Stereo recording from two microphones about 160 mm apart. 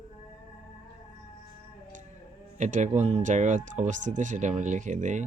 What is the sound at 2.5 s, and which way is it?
Speech, 50° right (ahead or behind).